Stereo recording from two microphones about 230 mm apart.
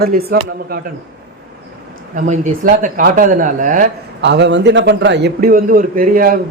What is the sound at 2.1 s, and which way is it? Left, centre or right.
Speech, right.